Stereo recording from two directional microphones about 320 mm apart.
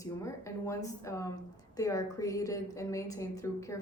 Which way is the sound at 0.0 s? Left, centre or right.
Centre.